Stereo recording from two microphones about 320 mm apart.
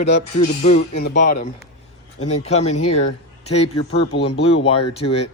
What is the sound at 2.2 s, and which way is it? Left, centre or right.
Speech, centre.